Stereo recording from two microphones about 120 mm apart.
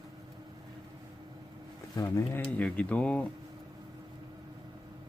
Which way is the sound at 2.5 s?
10° left (ahead or behind).